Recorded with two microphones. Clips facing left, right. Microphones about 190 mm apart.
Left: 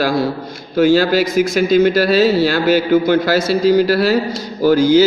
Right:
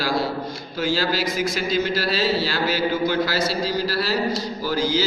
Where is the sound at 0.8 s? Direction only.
55° left (ahead or behind).